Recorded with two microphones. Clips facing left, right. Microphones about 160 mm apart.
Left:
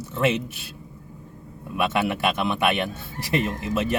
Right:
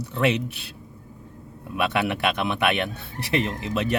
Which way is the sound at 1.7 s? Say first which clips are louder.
Left 1 dB; 60° right (ahead or behind).